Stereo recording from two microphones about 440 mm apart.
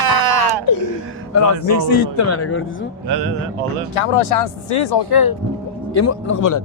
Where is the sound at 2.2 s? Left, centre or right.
Left.